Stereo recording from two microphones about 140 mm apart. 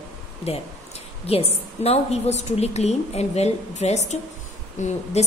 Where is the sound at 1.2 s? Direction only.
45° left (ahead or behind).